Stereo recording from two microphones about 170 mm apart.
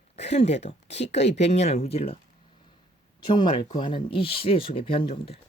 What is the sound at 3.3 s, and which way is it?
Speech, 30° left (ahead or behind).